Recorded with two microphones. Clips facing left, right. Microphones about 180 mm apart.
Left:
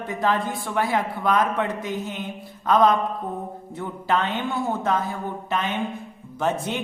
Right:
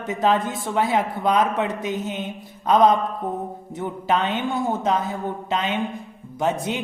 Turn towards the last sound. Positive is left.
turn(degrees=-15)  # may be behind; listen again after turning